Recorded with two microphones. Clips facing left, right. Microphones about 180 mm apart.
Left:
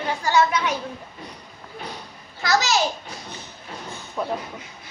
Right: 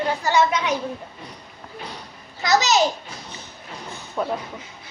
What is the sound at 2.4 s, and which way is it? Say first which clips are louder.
Speech: right 2 dB; 20° right (ahead or behind).